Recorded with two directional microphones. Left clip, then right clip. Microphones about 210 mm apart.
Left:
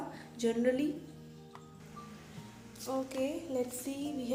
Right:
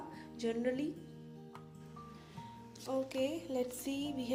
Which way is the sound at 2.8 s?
45° right (ahead or behind).